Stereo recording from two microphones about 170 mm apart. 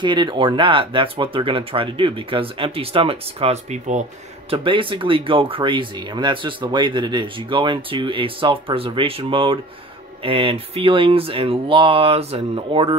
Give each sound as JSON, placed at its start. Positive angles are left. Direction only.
{"t": 0.0, "sound": "speech", "side_deg": -25}
{"t": 4.5, "sound": "speech", "side_deg": -30}